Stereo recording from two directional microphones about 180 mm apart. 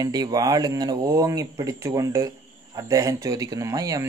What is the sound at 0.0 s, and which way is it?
Speech, 20° right (ahead or behind).